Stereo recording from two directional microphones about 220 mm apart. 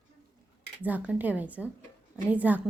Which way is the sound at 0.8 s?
5° right (ahead or behind).